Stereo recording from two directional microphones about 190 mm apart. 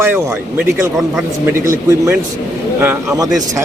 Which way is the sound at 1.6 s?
15° right (ahead or behind).